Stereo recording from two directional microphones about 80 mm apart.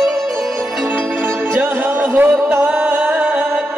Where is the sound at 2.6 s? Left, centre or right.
Centre.